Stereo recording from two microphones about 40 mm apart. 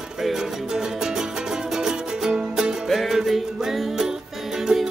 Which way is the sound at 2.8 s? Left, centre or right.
Centre.